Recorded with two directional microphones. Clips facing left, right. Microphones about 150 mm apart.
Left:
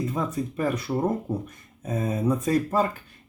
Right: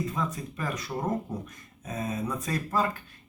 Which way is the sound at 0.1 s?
25° left (ahead or behind).